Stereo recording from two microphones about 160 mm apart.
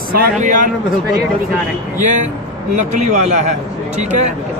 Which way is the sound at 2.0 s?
50° right (ahead or behind).